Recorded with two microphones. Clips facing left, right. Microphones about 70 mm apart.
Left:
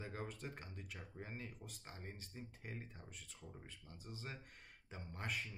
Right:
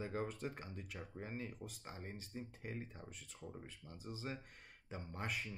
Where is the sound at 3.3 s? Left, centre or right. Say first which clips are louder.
Right 7 dB; right.